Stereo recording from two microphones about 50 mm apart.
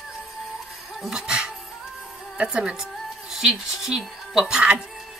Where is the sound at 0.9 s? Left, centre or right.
Centre.